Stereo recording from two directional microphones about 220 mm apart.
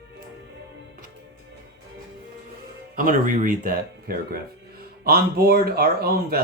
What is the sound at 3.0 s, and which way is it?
Speech, 35° right (ahead or behind).